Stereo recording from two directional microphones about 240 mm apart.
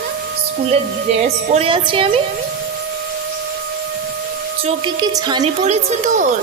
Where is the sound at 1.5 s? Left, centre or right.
Right.